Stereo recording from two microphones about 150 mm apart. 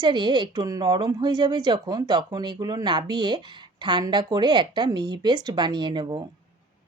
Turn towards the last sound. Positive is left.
turn(degrees=-30)  # may be behind; listen again after turning